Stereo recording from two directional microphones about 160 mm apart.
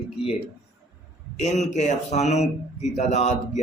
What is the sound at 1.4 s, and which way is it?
A man's voice, 45° left (ahead or behind).